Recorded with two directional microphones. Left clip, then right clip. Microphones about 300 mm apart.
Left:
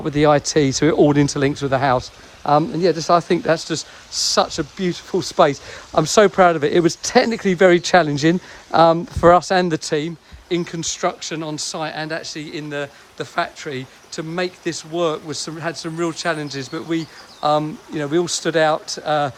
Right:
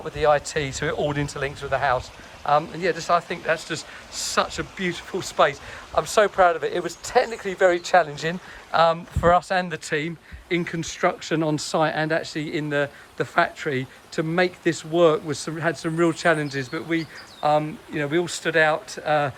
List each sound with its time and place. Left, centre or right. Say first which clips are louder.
0.2 s speech: left 5 dB; left